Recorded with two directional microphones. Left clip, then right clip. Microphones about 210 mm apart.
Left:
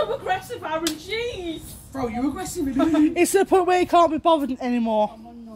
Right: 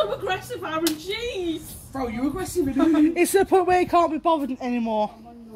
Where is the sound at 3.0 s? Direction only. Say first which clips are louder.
Left 1 dB; 10° left (ahead or behind).